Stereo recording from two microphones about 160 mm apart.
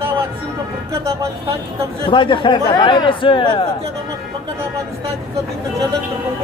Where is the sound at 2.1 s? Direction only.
30° left (ahead or behind).